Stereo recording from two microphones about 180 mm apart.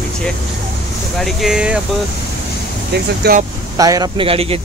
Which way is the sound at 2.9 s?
60° right (ahead or behind).